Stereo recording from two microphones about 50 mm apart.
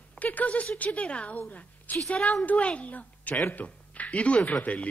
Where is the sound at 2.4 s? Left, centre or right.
Left.